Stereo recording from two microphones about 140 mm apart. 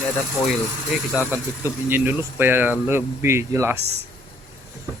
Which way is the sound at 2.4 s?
15° right (ahead or behind).